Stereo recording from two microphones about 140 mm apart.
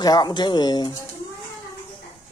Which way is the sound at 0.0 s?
30° left (ahead or behind).